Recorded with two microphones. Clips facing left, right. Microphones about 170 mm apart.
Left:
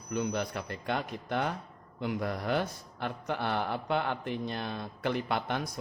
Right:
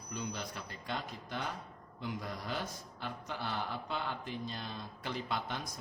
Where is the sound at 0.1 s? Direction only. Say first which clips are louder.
Left 9 dB; 60° left (ahead or behind).